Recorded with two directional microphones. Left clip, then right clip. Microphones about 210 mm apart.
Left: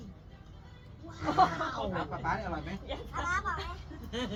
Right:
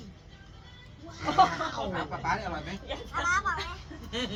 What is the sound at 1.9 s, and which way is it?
Speech, 20° left (ahead or behind).